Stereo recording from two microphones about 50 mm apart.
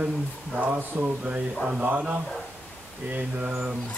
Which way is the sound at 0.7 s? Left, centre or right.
Right.